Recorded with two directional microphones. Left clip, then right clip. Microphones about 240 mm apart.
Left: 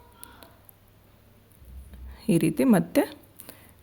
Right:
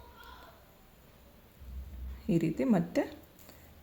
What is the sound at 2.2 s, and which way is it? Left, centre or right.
Speech, left.